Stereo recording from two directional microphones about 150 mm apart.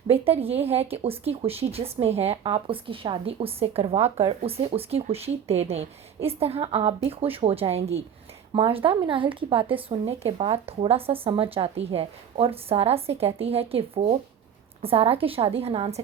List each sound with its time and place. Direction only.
0.1 s speech: 40° right (ahead or behind)